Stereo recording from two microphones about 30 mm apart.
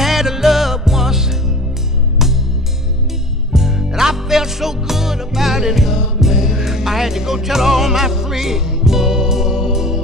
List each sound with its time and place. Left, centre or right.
0.0 s music: centre
3.5 s music: centre